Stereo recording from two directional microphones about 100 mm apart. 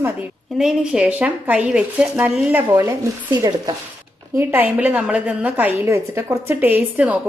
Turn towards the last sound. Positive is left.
turn(degrees=-15)  # may be behind; listen again after turning